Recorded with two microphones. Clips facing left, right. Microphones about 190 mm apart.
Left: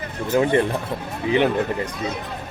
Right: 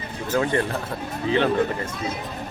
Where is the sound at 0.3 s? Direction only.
20° left (ahead or behind).